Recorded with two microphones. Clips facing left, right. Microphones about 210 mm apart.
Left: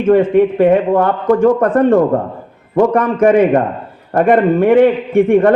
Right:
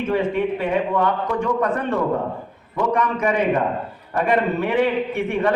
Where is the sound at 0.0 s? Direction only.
50° left (ahead or behind).